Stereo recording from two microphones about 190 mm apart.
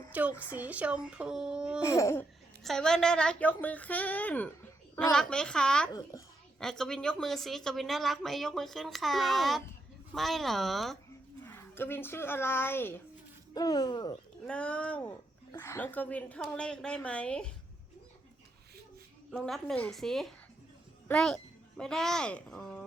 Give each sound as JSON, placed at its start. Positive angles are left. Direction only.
{"t": 0.1, "sound": "a woman's voice", "side_deg": -10}
{"t": 1.8, "sound": "a woman's voice", "side_deg": 15}
{"t": 2.6, "sound": "a woman's voice", "side_deg": 5}
{"t": 11.4, "sound": "speech", "side_deg": 10}
{"t": 14.4, "sound": "a woman's voice", "side_deg": 5}
{"t": 19.3, "sound": "a woman's voice", "side_deg": 0}